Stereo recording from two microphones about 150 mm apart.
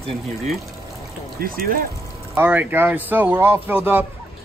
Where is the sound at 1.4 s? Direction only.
80° right.